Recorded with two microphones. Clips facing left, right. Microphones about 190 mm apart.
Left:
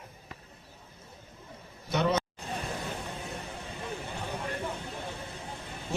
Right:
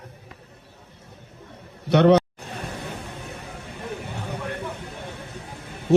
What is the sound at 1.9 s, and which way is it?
Speech, 70° right (ahead or behind).